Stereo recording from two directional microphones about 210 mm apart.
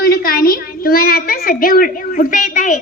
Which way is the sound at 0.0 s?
45° left (ahead or behind).